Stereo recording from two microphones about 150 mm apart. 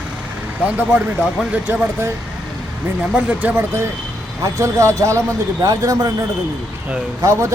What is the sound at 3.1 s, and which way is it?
A man's voice, 10° right (ahead or behind).